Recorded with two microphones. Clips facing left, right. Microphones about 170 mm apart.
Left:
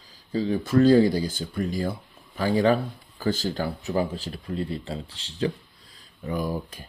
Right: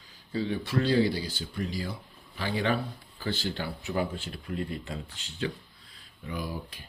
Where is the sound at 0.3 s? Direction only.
40° left (ahead or behind).